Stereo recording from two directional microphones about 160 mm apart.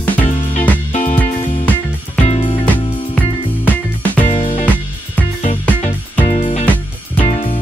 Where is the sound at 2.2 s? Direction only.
40° left (ahead or behind).